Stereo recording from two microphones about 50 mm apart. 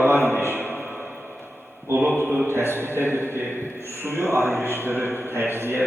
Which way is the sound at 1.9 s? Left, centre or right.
Right.